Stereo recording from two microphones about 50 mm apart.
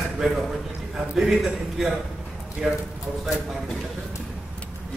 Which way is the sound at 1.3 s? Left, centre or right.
Centre.